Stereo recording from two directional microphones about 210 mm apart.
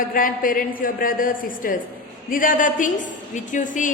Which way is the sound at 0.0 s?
40° left (ahead or behind).